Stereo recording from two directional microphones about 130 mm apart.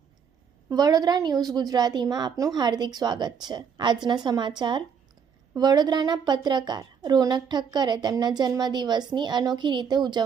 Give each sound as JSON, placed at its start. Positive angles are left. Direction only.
{"t": 0.7, "sound": "a woman's voice", "side_deg": -30}